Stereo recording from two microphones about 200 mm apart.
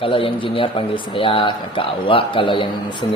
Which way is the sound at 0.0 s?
25° left (ahead or behind).